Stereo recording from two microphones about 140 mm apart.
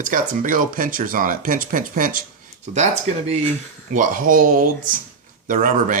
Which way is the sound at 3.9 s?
70° right (ahead or behind).